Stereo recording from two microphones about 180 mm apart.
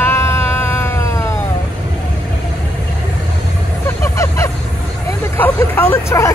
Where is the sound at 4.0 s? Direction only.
15° left (ahead or behind).